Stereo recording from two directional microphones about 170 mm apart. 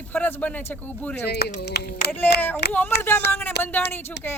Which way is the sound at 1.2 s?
75° left (ahead or behind).